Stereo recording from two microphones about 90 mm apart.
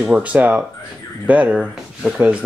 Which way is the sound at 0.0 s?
15° right (ahead or behind).